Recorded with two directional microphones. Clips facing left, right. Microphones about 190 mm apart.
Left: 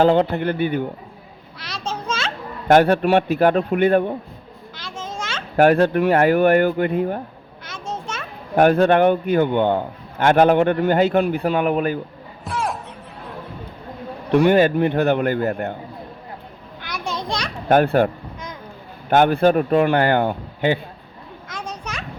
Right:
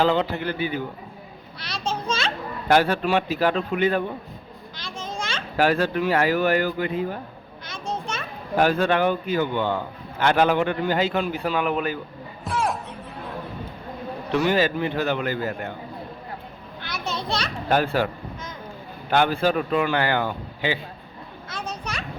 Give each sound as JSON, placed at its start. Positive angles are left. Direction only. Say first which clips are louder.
{"t": 0.0, "sound": "speech", "louder": "left 6 dB", "side_deg": 50}
{"t": 1.6, "sound": "a child's voice", "louder": "even", "side_deg": 10}
{"t": 2.0, "sound": "children playing", "louder": "left 1 dB", "side_deg": 10}
{"t": 2.6, "sound": "speech", "louder": "left 6 dB", "side_deg": 55}
{"t": 4.8, "sound": "children playing", "louder": "left 1 dB", "side_deg": 5}
{"t": 5.5, "sound": "speech", "louder": "left 7 dB", "side_deg": 55}
{"t": 7.6, "sound": "children playing", "louder": "even", "side_deg": 10}
{"t": 8.5, "sound": "a man's voice", "louder": "left 6 dB", "side_deg": 55}
{"t": 12.5, "sound": "music", "louder": "even", "side_deg": 0}
{"t": 14.3, "sound": "speech", "louder": "left 7 dB", "side_deg": 55}
{"t": 17.0, "sound": "children playing", "louder": "left 2 dB", "side_deg": 15}
{"t": 17.7, "sound": "a man's voice", "louder": "left 6 dB", "side_deg": 55}
{"t": 19.1, "sound": "a man's voice", "louder": "left 6 dB", "side_deg": 50}
{"t": 21.5, "sound": "children playing", "louder": "left 1 dB", "side_deg": 10}